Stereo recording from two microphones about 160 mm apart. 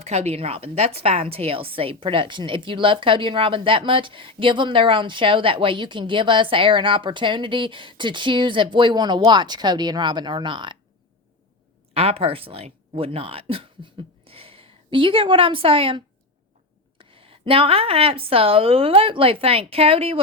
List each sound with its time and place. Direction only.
0.0 s a woman's voice: 45° right (ahead or behind)
11.9 s a woman's voice: 40° right (ahead or behind)